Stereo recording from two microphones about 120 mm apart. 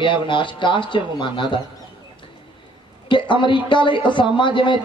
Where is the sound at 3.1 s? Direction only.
40° left (ahead or behind).